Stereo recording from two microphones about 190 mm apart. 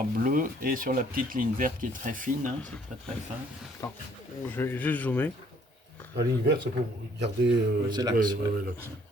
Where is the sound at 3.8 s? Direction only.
15° left (ahead or behind).